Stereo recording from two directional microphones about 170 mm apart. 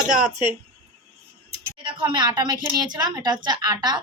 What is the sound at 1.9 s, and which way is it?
A woman's voice, 30° right (ahead or behind).